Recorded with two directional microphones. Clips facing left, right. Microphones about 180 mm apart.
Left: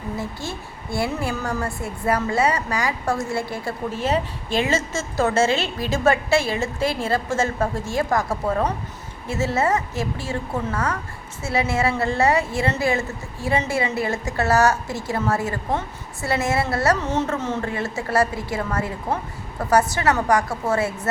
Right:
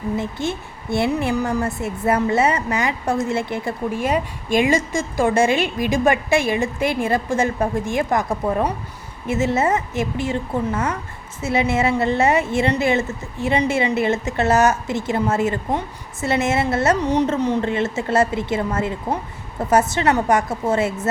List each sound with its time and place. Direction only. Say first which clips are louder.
0.2 s a woman's voice: right 5 dB; 20° right (ahead or behind)